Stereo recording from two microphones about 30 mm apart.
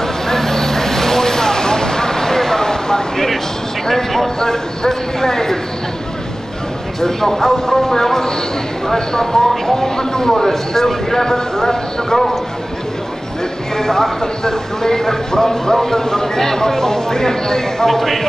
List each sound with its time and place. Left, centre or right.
0.0 s vehicle: centre
3.8 s a sound: centre
7.0 s speech: centre
13.7 s speech: centre